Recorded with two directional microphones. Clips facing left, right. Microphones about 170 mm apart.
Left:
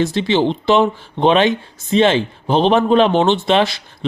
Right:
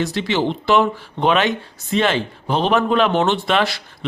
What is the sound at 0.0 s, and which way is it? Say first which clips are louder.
Speech: left 4 dB; 25° left (ahead or behind).